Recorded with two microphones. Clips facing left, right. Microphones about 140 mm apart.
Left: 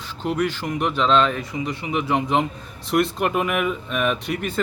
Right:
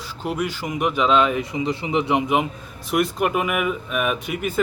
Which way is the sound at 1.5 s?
25° right (ahead or behind).